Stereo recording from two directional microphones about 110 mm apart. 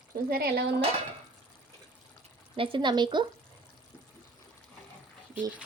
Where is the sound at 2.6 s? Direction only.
45° right (ahead or behind).